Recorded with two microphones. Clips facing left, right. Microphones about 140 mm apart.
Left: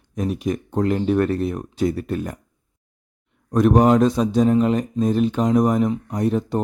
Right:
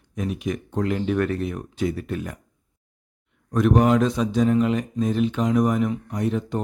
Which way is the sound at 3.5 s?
35° left (ahead or behind).